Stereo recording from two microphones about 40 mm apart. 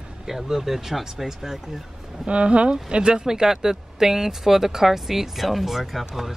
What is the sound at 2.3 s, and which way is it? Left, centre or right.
Speech, right.